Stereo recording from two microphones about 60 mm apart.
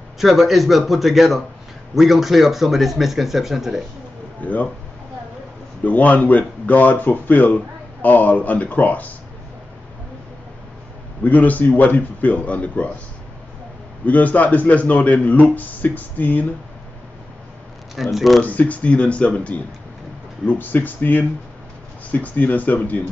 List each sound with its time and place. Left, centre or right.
0.2 s speech: centre
4.4 s speech: left
5.9 s speech: left
11.2 s speech: left
14.0 s speech: left
17.9 s speech: centre
18.4 s speech: left
20.4 s speech: left